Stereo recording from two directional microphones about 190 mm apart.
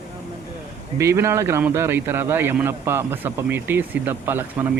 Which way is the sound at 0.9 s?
15° right (ahead or behind).